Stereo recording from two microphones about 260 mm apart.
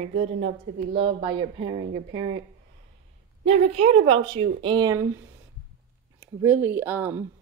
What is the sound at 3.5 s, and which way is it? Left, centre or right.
A woman's voice, right.